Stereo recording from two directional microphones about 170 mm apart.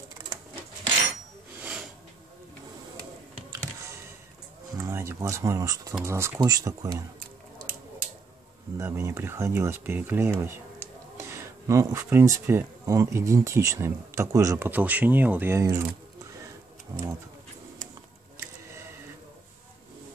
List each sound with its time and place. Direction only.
1.6 s a sound: 5° right (ahead or behind)
4.7 s speech: 15° right (ahead or behind)
8.7 s speech: 15° right (ahead or behind)
16.9 s speech: 20° right (ahead or behind)